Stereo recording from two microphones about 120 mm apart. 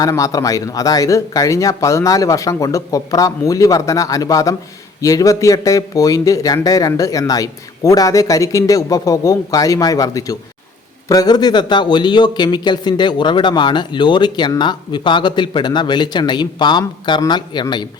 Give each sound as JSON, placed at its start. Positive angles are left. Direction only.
{"t": 0.0, "sound": "a man's voice", "side_deg": 30}